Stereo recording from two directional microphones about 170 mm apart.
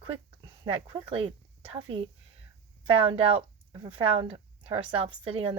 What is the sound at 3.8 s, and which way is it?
Speech, 30° right (ahead or behind).